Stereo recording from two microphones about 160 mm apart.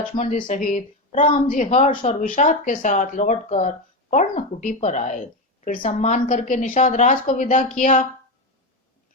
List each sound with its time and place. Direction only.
0.0 s a woman's voice: 50° left (ahead or behind)